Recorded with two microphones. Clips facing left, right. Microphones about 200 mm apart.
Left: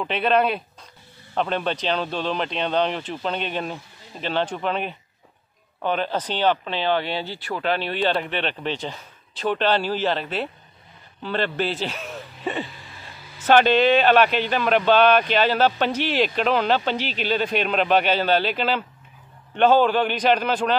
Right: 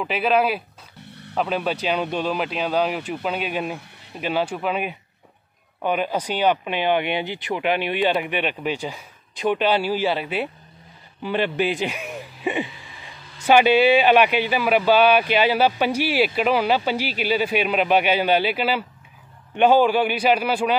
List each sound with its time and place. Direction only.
0.0 s a man's voice: 5° right (ahead or behind)